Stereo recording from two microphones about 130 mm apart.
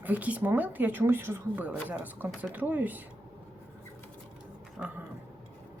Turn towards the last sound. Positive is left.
turn(degrees=-10)  # may be behind; listen again after turning